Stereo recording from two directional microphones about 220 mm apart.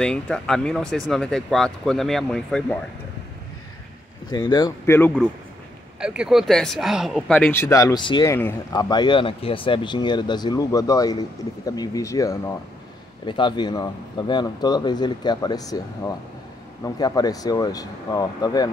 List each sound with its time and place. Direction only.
0.0 s speech: 5° left (ahead or behind)
4.3 s speech: 20° left (ahead or behind)
5.9 s speech: 5° right (ahead or behind); by 18.7 s 15° left (ahead or behind)